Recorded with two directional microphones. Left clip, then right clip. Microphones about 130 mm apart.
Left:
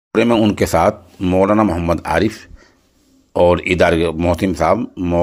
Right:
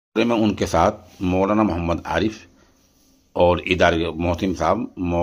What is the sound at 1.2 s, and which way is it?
Speech, 10° left (ahead or behind).